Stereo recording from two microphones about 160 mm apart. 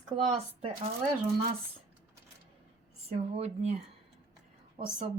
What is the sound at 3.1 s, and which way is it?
Speech, 45° right (ahead or behind).